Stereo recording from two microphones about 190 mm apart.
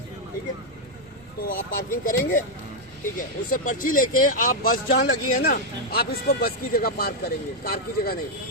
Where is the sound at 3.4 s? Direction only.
45° left (ahead or behind).